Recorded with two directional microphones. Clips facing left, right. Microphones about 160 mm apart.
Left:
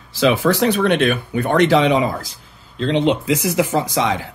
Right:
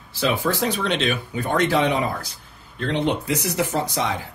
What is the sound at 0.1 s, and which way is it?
Speech, 90° left.